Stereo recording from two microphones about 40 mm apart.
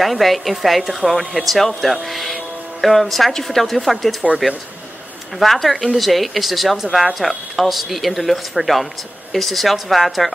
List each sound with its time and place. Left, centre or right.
0.0 s speech: centre
5.4 s speech: centre